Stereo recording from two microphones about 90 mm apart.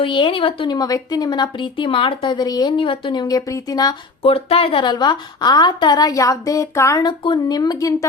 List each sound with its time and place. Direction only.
0.0 s a woman's voice: 65° left (ahead or behind)
0.8 s a woman's voice: 40° left (ahead or behind); by 3.2 s 65° left (ahead or behind)
3.2 s a woman's voice: 40° left (ahead or behind)
4.2 s a woman's voice: 90° left; by 7.0 s 35° left (ahead or behind)
7.0 s a woman's voice: 55° left (ahead or behind)